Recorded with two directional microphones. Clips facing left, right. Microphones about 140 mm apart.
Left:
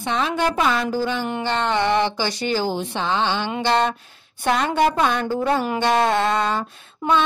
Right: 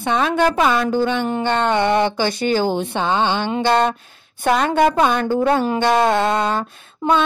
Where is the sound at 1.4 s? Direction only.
55° right (ahead or behind).